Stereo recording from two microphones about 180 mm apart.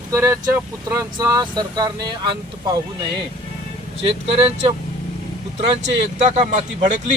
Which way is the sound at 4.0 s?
30° right (ahead or behind).